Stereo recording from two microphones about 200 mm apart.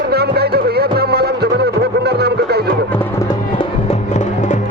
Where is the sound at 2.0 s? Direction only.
55° right (ahead or behind).